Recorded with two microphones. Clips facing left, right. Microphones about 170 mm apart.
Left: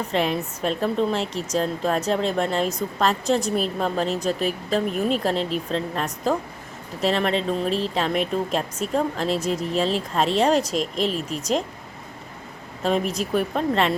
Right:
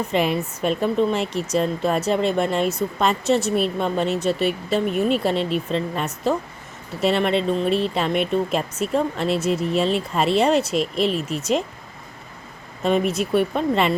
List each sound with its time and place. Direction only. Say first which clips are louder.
0.1 s speech: right 1 dB; 5° right (ahead or behind)
12.8 s speech: right 3 dB; centre (ahead or behind)